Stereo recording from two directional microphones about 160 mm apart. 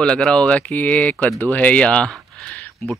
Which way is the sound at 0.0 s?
5° left (ahead or behind).